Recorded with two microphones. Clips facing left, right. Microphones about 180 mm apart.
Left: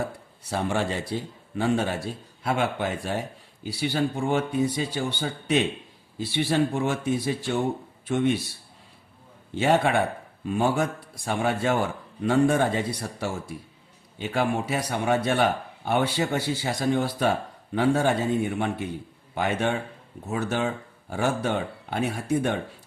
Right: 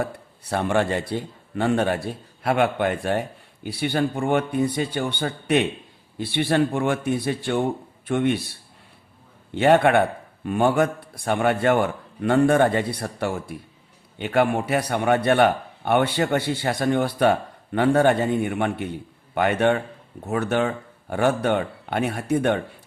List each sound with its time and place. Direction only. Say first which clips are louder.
0.0 s a man's voice: right 3 dB; 60° right (ahead or behind)
9.6 s a man's voice: right 5 dB; 60° right (ahead or behind)